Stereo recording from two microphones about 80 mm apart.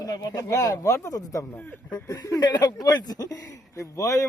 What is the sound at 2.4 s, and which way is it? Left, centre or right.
Speech, left.